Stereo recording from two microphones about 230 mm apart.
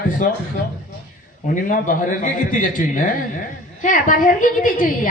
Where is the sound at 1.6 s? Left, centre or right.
Left.